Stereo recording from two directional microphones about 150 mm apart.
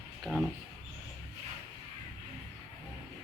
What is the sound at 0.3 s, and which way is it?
Speech, centre (ahead or behind).